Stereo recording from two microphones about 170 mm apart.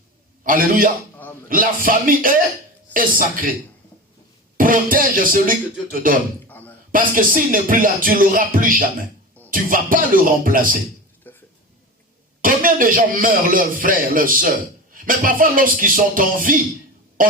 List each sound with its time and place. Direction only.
0.4 s a man's voice: 55° right (ahead or behind)
4.5 s speech: 55° right (ahead or behind)
6.5 s a sound: 10° left (ahead or behind)
6.9 s a man's voice: 55° right (ahead or behind)
11.2 s a sound: 10° left (ahead or behind)
12.4 s a man's voice: 55° right (ahead or behind)